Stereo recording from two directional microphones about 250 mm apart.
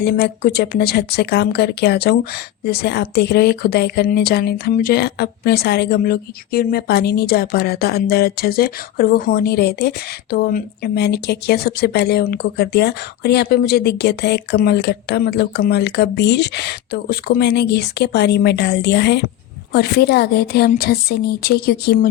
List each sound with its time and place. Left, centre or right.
0.0 s speech: left